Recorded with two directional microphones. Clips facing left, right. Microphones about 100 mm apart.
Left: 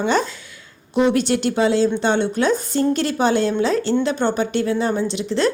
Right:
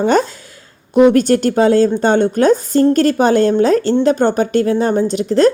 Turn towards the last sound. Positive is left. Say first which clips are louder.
# right 7 dB
turn(degrees=-40)  # may be behind; listen again after turning